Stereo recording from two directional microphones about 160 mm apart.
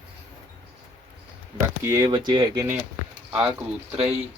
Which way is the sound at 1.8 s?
25° right (ahead or behind).